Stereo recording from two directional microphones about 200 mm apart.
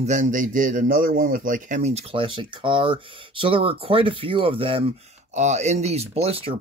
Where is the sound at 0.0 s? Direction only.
40° right (ahead or behind).